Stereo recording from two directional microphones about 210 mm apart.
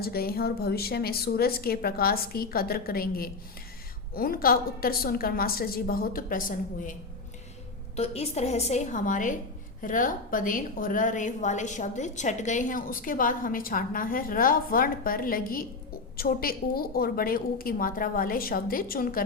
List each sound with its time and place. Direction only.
0.0 s a woman's voice: 45° left (ahead or behind)
7.9 s a woman's voice: 30° left (ahead or behind)